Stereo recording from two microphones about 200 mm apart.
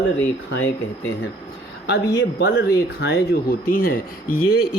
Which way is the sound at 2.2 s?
60° left (ahead or behind).